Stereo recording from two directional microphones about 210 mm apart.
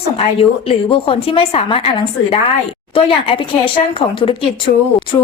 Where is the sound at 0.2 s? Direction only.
25° left (ahead or behind).